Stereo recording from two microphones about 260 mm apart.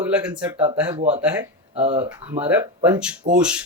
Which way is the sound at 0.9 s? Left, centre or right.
Right.